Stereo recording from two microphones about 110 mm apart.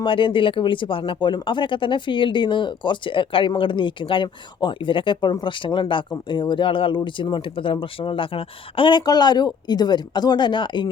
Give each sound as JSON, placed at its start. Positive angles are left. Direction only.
{"t": 0.0, "sound": "speech", "side_deg": 50}